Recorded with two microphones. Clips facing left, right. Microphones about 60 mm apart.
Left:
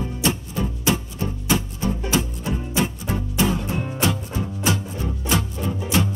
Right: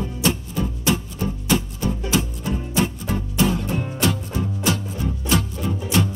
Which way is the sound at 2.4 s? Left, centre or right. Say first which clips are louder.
Right 1 dB; left.